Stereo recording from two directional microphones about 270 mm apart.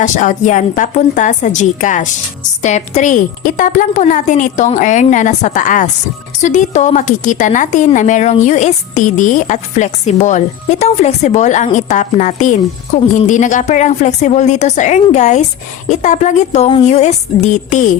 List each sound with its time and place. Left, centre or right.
0.0 s a woman's voice: left